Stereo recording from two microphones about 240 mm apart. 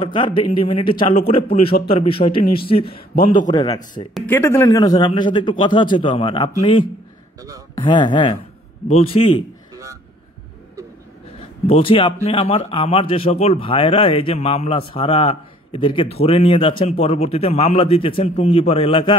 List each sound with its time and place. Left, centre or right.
0.0 s a man's voice: centre
11.6 s speech: left